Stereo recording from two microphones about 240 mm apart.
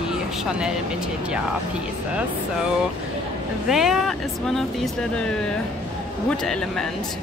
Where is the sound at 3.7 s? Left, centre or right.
Centre.